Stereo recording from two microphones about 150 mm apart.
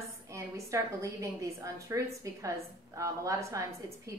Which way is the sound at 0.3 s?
20° right (ahead or behind).